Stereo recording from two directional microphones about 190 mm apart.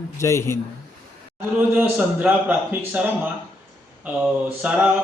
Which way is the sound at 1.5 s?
10° right (ahead or behind).